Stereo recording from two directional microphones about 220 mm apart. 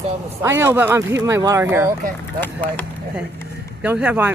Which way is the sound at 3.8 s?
5° right (ahead or behind).